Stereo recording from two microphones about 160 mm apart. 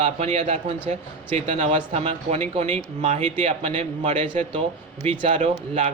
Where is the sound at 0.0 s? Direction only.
40° right (ahead or behind).